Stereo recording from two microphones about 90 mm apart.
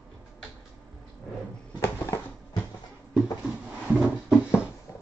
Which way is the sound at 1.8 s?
30° left (ahead or behind).